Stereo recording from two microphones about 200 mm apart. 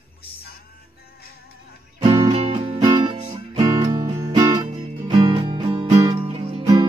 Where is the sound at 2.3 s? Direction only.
30° right (ahead or behind).